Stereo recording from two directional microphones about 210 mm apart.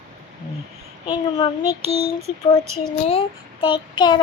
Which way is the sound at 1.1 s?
25° left (ahead or behind).